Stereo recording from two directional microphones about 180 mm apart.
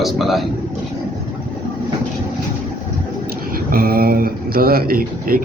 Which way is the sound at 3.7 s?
55° right (ahead or behind).